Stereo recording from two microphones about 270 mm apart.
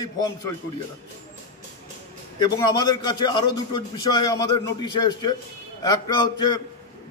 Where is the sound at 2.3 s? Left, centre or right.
Centre.